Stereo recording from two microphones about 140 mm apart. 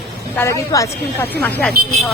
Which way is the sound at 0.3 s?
20° left (ahead or behind).